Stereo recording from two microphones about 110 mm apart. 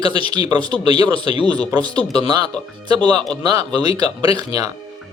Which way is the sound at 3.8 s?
40° right (ahead or behind).